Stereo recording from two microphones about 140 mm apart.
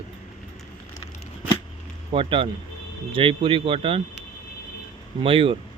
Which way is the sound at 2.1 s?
40° right (ahead or behind).